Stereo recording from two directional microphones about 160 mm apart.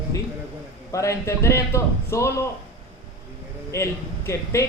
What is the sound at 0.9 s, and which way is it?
A man's voice, 20° left (ahead or behind).